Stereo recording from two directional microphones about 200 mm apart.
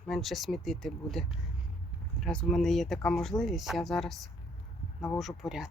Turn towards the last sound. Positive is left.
turn(degrees=0)  # may be behind; listen again after turning